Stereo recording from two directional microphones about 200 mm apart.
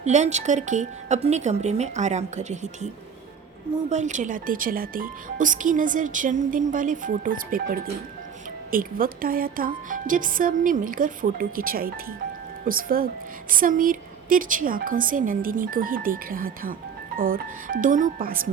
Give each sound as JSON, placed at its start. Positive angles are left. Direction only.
{"t": 0.0, "sound": "speech", "side_deg": -35}